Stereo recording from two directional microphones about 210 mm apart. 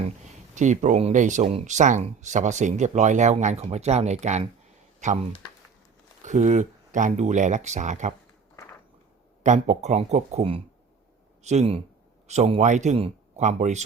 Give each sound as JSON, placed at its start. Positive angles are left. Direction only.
{"t": 0.5, "sound": "speech", "side_deg": -35}
{"t": 6.2, "sound": "speech", "side_deg": -35}
{"t": 9.4, "sound": "speech", "side_deg": -35}